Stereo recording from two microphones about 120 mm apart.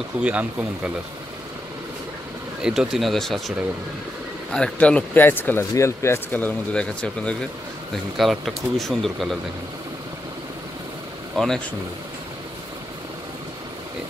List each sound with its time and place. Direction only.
0.2 s speech: 10° right (ahead or behind)
2.6 s speech: 5° right (ahead or behind)
11.3 s speech: 5° left (ahead or behind)